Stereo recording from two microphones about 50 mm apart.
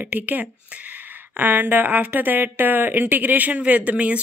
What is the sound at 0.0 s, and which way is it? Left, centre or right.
Speech, right.